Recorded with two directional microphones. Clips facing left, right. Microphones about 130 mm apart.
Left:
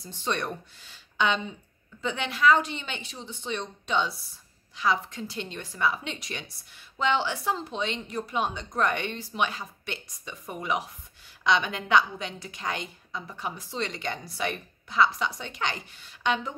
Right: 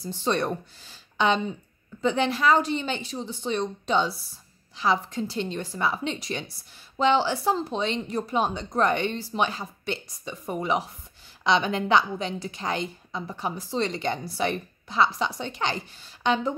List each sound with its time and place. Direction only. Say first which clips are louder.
0.0 s a woman's voice: right 5 dB; 35° right (ahead or behind)